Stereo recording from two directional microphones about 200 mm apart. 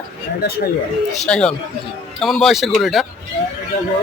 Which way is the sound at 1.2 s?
5° left (ahead or behind).